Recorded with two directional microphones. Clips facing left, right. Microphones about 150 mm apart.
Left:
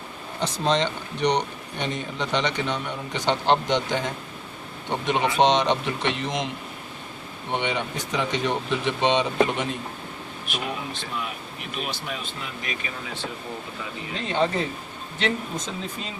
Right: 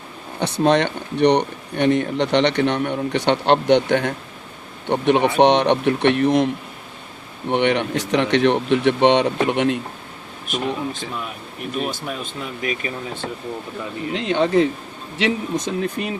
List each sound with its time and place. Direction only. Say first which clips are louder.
0.3 s speech: right 6 dB; 65° right (ahead or behind)
7.5 s speech: right 8 dB; 65° right (ahead or behind)
10.4 s speech: right 7 dB; 45° right (ahead or behind)
14.1 s speech: right 6 dB; 80° right